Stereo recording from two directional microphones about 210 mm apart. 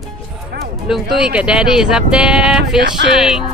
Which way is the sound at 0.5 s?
50° right (ahead or behind).